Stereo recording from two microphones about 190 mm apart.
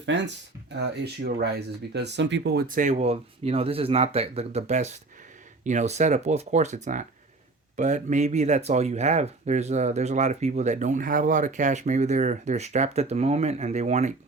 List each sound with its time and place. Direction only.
0.7 s speech: 60° right (ahead or behind); by 14.1 s 35° right (ahead or behind)